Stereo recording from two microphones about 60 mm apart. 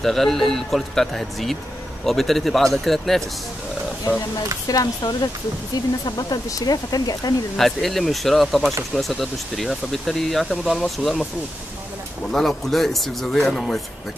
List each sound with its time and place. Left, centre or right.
0.0 s speech: centre
4.6 s speech: left
7.5 s speech: centre
12.3 s speech: centre